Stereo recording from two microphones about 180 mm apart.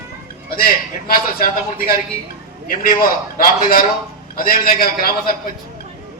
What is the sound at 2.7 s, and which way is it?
A man's voice, 55° left (ahead or behind).